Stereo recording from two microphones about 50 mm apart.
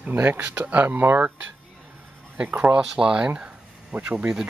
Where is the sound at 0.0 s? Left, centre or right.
Right.